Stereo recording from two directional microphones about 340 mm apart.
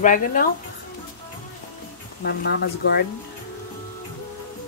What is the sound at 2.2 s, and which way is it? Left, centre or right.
Speech, left.